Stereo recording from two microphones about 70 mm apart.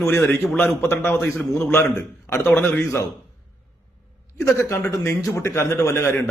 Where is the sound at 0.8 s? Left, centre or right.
Left.